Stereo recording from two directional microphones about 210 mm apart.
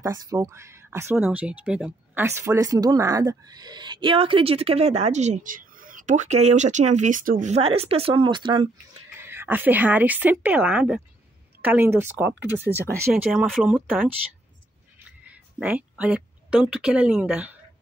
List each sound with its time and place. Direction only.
0.0 s speech: 15° right (ahead or behind)
9.2 s speech: 10° right (ahead or behind)
15.2 s a sound: 5° right (ahead or behind)
16.7 s speech: 5° right (ahead or behind)